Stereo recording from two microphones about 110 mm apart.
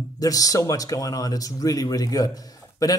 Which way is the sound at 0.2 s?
30° left (ahead or behind).